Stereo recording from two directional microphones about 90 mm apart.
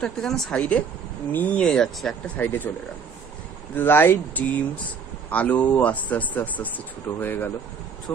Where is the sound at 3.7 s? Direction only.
25° left (ahead or behind).